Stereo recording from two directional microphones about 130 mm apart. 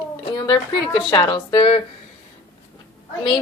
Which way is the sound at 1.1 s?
35° left (ahead or behind).